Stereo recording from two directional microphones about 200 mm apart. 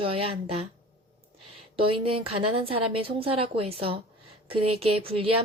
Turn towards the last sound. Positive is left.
turn(degrees=-25)  # may be behind; listen again after turning